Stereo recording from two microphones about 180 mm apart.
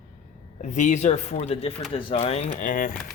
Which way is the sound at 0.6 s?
40° left (ahead or behind).